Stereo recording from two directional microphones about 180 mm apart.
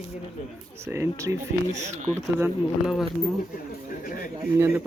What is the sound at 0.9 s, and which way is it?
Speech, 15° right (ahead or behind).